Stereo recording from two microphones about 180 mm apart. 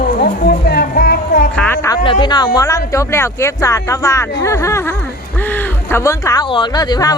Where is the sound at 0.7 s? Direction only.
60° left (ahead or behind).